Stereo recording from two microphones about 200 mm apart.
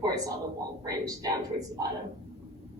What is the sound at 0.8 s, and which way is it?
Speech, 15° right (ahead or behind).